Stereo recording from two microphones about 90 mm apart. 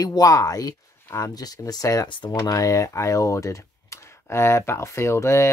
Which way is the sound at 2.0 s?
60° left (ahead or behind).